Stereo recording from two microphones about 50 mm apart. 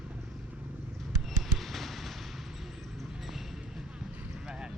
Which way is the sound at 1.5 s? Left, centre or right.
Centre.